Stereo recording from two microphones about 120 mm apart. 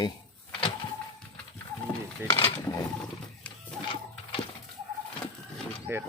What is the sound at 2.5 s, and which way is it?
Speech, 25° left (ahead or behind).